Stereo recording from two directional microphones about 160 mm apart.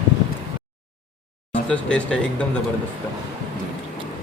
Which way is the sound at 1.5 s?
5° left (ahead or behind).